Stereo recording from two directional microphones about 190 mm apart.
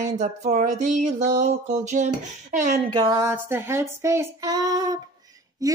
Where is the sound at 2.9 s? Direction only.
20° right (ahead or behind).